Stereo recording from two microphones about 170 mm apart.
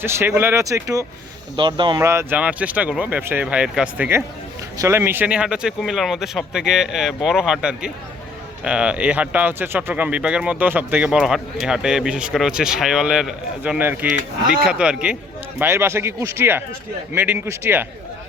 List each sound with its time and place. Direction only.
0.0 s speech: 15° right (ahead or behind)
2.0 s speech: 15° right (ahead or behind)